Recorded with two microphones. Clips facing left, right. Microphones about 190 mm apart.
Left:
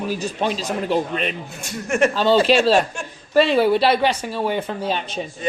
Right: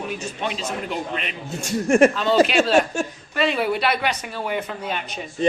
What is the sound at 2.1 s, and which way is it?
Speech, 35° left (ahead or behind).